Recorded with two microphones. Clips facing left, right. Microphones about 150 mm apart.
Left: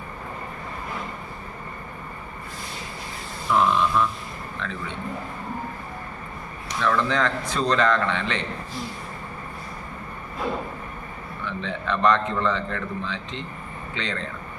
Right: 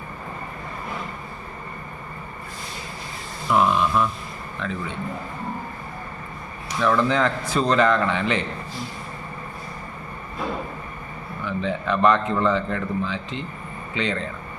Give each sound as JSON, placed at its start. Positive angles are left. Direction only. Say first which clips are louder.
{"t": 3.5, "sound": "a man's voice", "louder": "right 1 dB", "side_deg": -10}
{"t": 6.7, "sound": "a man's voice", "louder": "right 3 dB", "side_deg": -10}
{"t": 11.4, "sound": "a man's voice", "louder": "right 4 dB", "side_deg": -5}